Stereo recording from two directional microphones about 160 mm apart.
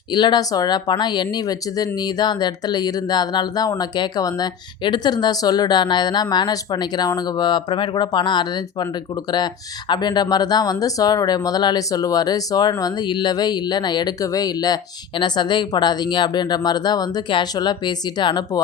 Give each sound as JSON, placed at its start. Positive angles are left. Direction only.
{"t": 0.1, "sound": "speech", "side_deg": 30}
{"t": 9.9, "sound": "speech", "side_deg": 25}